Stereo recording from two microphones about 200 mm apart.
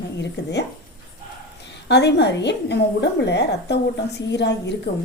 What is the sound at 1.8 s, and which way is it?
A woman's voice, 60° left (ahead or behind).